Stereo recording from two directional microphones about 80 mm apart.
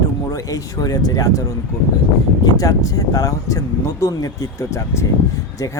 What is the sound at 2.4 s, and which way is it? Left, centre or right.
Speech, left.